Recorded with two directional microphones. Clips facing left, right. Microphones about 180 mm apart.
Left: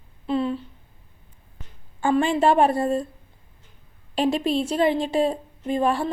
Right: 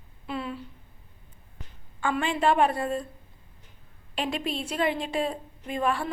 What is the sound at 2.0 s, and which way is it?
A woman's voice, 30° left (ahead or behind).